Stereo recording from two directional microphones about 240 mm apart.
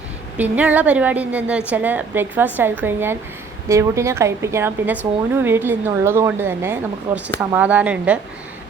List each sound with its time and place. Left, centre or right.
0.3 s speech: centre